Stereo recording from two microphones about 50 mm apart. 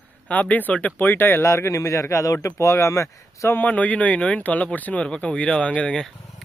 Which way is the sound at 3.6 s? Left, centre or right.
Left.